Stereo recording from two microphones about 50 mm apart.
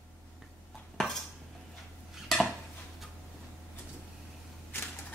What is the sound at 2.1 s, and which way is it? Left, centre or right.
Dishes, centre.